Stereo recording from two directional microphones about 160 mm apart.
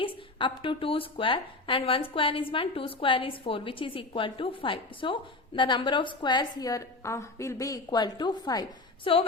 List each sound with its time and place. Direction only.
0.0 s a woman's voice: 30° left (ahead or behind)